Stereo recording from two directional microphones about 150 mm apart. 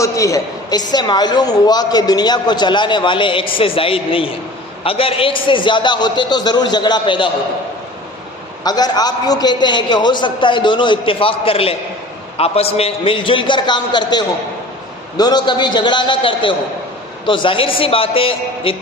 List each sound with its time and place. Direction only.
0.0 s a woman's voice: 20° left (ahead or behind)
8.6 s a man's voice: 25° left (ahead or behind)